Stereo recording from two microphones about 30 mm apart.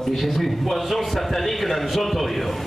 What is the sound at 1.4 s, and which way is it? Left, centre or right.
Speech, centre.